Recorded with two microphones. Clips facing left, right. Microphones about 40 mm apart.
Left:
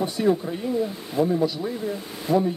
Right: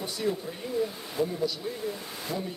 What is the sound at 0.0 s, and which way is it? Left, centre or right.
Speech, left.